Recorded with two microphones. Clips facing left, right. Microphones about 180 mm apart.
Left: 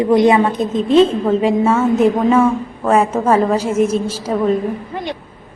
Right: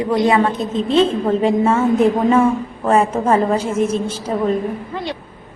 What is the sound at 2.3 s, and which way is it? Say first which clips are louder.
A woman's voice: left 1 dB; 10° right (ahead or behind).